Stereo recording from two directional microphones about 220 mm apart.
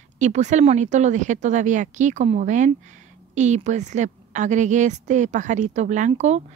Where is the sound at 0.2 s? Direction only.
35° right (ahead or behind).